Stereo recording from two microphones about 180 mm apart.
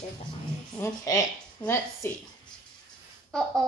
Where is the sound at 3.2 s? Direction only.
Centre (ahead or behind).